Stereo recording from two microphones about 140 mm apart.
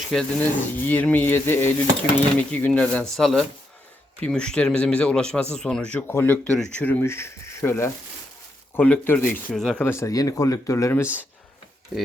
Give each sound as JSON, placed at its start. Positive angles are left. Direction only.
{"t": 0.1, "sound": "a man's voice", "side_deg": 5}
{"t": 9.8, "sound": "speech", "side_deg": 20}